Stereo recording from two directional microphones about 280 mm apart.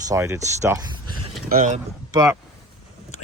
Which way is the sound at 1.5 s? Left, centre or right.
Right.